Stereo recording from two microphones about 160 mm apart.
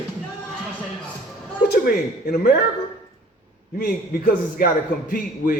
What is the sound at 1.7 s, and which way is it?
Speech, 70° left (ahead or behind).